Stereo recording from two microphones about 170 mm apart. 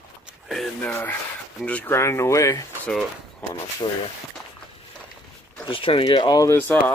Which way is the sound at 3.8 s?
25° left (ahead or behind).